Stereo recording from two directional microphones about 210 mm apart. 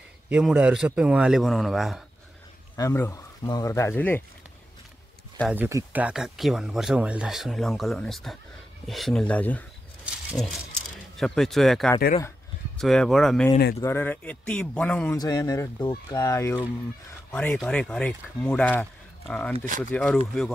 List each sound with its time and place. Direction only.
0.3 s speech: 5° right (ahead or behind)
2.7 s speech: 15° left (ahead or behind)
5.5 s speech: 10° right (ahead or behind); by 15.1 s 5° left (ahead or behind)
15.1 s speech: 15° left (ahead or behind)
19.5 s speech: 35° right (ahead or behind)
19.8 s speech: 5° left (ahead or behind)